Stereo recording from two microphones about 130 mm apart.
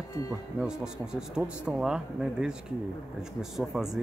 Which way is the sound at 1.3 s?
5° right (ahead or behind).